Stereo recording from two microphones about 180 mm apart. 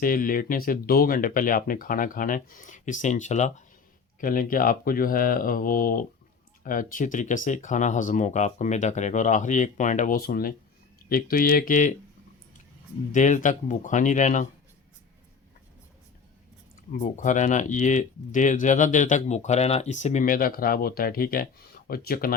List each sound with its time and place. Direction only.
0.0 s speech: 50° left (ahead or behind)
13.1 s speech: 45° left (ahead or behind)
16.9 s speech: 45° left (ahead or behind)